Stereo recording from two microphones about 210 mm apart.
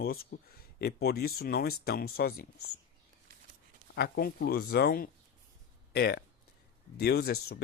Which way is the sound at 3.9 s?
50° left (ahead or behind).